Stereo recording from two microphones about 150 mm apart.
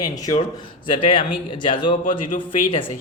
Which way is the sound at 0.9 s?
35° left (ahead or behind).